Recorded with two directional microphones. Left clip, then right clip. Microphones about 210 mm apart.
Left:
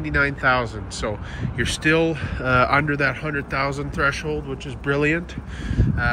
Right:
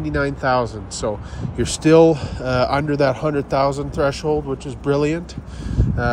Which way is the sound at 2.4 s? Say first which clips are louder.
Left 2 dB; 10° right (ahead or behind).